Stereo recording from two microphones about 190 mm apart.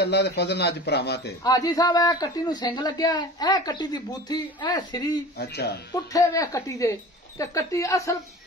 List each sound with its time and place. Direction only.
0.0 s speech: 60° left (ahead or behind)
1.4 s a man's voice: 20° left (ahead or behind)
5.4 s speech: 60° left (ahead or behind)
6.1 s speech: 15° left (ahead or behind)